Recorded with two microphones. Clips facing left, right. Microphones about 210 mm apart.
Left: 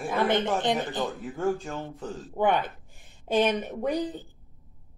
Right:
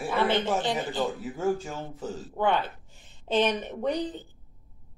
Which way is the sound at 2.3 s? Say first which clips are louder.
Left 2 dB; 15° left (ahead or behind).